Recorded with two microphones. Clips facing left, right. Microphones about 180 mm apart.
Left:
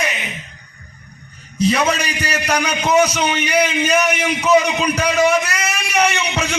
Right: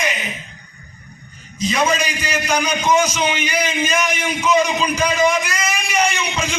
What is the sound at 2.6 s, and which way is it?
A man's voice, 65° left (ahead or behind).